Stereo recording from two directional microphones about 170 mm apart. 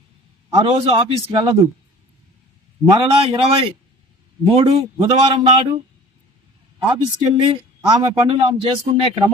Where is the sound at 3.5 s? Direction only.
35° right (ahead or behind).